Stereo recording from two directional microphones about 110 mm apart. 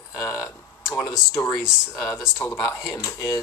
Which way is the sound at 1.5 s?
Centre (ahead or behind).